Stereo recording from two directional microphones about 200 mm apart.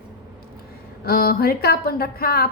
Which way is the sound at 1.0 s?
50° left (ahead or behind).